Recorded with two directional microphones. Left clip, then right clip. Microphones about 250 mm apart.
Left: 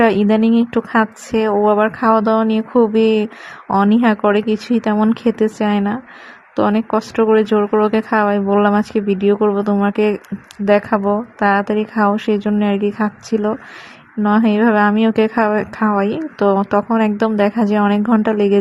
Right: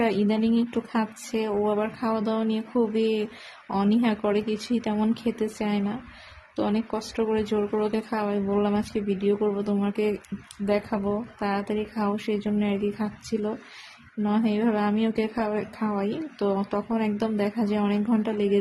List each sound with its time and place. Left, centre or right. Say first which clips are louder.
0.0 s speech: left 11 dB; left